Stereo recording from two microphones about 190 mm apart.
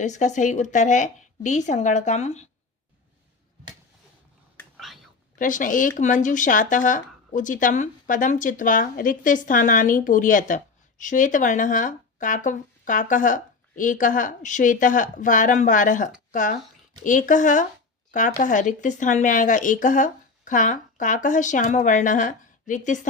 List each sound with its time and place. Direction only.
0.0 s speech: 40° left (ahead or behind)
5.4 s speech: 45° left (ahead or behind)